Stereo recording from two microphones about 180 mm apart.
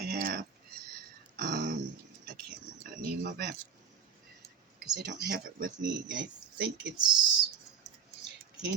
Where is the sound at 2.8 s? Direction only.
55° right (ahead or behind).